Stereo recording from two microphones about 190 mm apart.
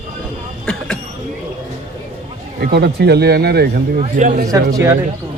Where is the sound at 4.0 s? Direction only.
40° right (ahead or behind).